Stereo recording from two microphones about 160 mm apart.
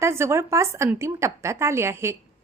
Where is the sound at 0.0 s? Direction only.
15° right (ahead or behind).